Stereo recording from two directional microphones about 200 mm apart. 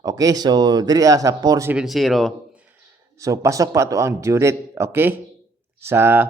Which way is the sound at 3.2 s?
15° right (ahead or behind).